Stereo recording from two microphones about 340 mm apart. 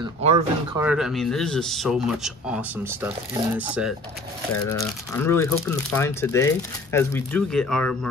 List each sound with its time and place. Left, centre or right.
0.0 s speech: centre
0.7 s speech: centre
4.6 s speech: centre